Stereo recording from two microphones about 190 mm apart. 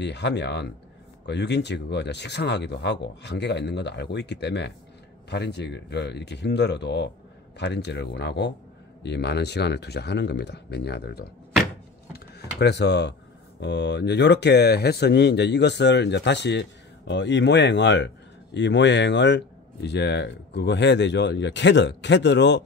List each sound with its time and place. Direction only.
0.0 s speech: 65° left (ahead or behind)